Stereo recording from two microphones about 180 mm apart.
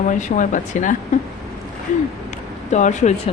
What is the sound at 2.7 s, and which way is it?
Speech, 40° left (ahead or behind).